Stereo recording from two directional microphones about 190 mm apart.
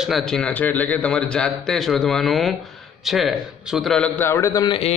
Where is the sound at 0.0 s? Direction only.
Centre (ahead or behind).